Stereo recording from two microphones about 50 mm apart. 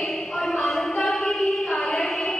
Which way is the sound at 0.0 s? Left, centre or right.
Centre.